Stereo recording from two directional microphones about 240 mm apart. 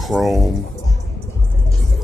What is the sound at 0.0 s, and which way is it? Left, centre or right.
Speech, centre.